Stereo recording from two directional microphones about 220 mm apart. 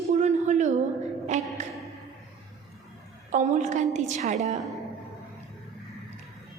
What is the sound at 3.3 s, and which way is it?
A woman's voice, 35° right (ahead or behind).